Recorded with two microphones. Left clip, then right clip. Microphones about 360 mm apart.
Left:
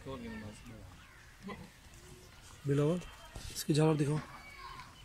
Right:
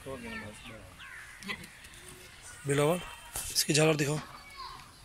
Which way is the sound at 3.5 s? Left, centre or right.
Centre.